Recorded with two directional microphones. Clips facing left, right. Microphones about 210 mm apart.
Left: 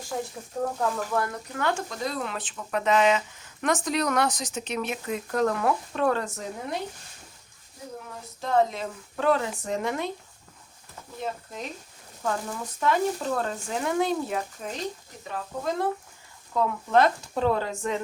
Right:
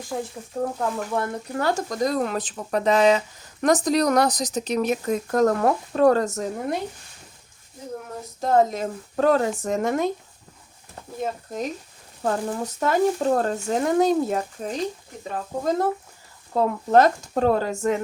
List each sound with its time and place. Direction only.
0.6 s speech: 5° right (ahead or behind)
1.1 s speech: 25° right (ahead or behind); by 6.7 s 45° right (ahead or behind)
8.4 s speech: 45° right (ahead or behind)
11.2 s speech: 45° right (ahead or behind)
16.5 s speech: 40° right (ahead or behind)